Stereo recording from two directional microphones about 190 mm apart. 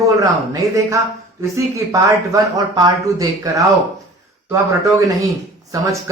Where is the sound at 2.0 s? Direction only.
20° right (ahead or behind).